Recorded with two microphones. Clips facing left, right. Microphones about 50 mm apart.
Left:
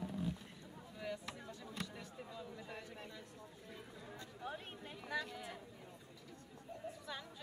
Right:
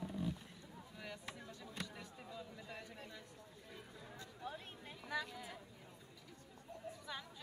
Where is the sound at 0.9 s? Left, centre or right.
Centre.